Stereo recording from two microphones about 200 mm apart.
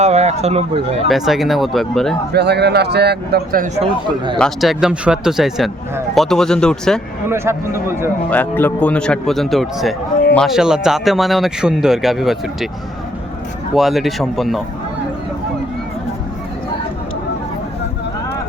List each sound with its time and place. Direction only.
0.0 s speech: 35° right (ahead or behind)
1.0 s speech: centre (ahead or behind)
2.3 s speech: 55° right (ahead or behind)
4.4 s speech: centre (ahead or behind)
7.3 s speech: 15° right (ahead or behind)
8.3 s speech: 10° left (ahead or behind)
13.7 s speech: centre (ahead or behind)